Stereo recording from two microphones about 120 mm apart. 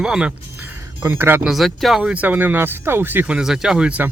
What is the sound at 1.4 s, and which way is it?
Speech, centre (ahead or behind).